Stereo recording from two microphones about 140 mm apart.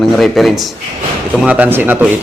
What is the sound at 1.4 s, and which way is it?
Speech, 10° right (ahead or behind).